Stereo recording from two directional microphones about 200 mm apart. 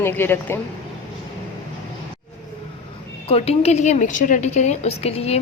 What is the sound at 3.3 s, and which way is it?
A woman's voice, 30° left (ahead or behind).